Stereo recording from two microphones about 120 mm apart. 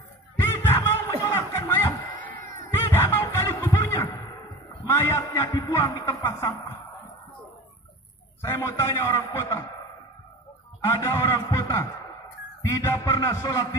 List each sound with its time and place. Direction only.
0.4 s a sound: 20° left (ahead or behind)
2.4 s music: 25° left (ahead or behind)
4.8 s a sound: 25° left (ahead or behind)
5.5 s a man's voice: 30° left (ahead or behind)
8.4 s a man's voice: 25° left (ahead or behind)
10.8 s a man's voice: 20° left (ahead or behind)